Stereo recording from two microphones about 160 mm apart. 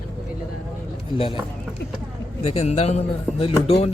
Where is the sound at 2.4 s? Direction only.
40° left (ahead or behind).